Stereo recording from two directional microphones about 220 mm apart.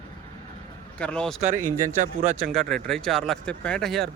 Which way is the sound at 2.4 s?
Centre (ahead or behind).